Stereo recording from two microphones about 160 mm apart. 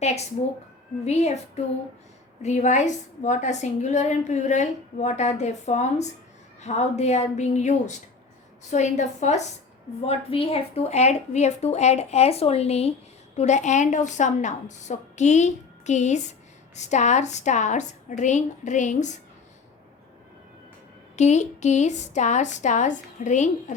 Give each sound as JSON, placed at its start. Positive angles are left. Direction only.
{"t": 1.0, "sound": "a woman's voice", "side_deg": 40}
{"t": 2.4, "sound": "a woman's voice", "side_deg": 45}
{"t": 10.1, "sound": "a woman's voice", "side_deg": 35}
{"t": 21.2, "sound": "a woman's voice", "side_deg": 45}